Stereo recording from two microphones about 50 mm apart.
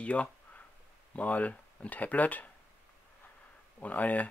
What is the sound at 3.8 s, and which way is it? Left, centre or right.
Speech, left.